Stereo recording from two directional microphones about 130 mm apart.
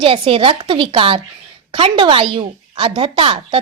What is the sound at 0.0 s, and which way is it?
A woman's voice, 45° right (ahead or behind).